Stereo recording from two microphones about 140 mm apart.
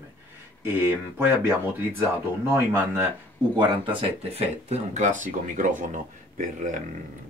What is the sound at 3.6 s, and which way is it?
Speech, 40° right (ahead or behind).